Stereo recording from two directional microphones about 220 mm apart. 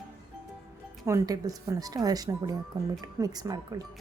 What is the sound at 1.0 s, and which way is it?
A woman's voice, 15° right (ahead or behind).